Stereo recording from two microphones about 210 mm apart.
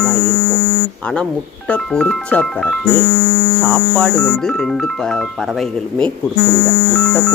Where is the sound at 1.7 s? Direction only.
5° left (ahead or behind).